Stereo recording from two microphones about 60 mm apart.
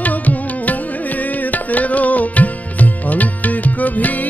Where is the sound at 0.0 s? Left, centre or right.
Left.